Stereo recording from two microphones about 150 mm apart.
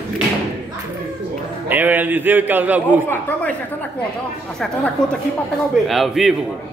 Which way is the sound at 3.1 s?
10° left (ahead or behind).